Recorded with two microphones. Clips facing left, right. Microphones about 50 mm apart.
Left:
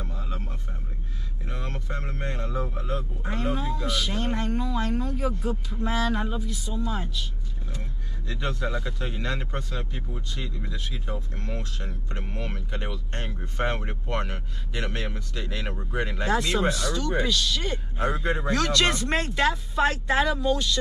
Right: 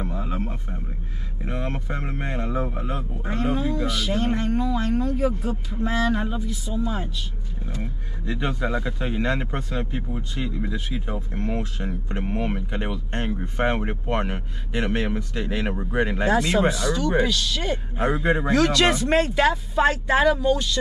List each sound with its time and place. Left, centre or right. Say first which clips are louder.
0.0 s a sound: right 8 dB; centre
1.4 s speech: right 7 dB; right
3.3 s speech: right 5 dB; centre
16.3 s speech: right 3 dB; centre